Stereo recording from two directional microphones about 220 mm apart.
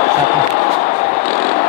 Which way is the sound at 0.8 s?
35° left (ahead or behind).